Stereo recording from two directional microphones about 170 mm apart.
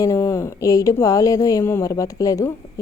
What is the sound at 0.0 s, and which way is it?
Speech, 15° left (ahead or behind).